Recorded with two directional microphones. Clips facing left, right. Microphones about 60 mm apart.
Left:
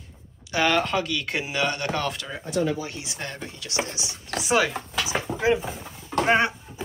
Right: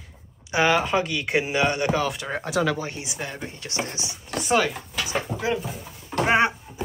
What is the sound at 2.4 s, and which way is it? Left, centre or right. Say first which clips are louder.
Speech: right 1 dB; right.